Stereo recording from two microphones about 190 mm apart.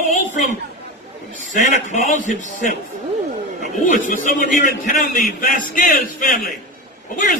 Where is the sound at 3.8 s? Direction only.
45° left (ahead or behind).